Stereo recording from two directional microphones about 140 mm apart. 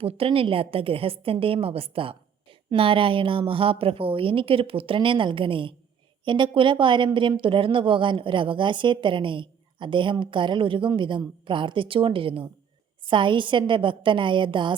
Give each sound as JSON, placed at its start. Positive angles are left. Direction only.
{"t": 0.0, "sound": "speech", "side_deg": -45}